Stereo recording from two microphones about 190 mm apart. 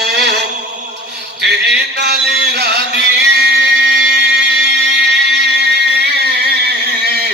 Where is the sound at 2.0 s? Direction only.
60° right (ahead or behind).